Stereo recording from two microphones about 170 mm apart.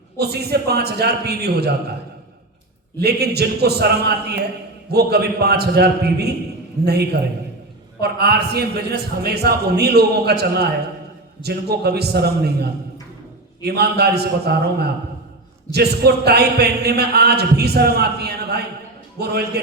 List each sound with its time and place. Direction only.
0.2 s speech: 70° right (ahead or behind)
3.0 s speech: 70° right (ahead or behind)